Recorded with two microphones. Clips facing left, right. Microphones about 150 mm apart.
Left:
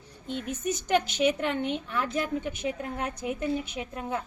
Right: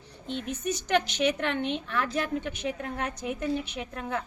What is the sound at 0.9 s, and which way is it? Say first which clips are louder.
A woman's voice: left 1 dB; 10° left (ahead or behind).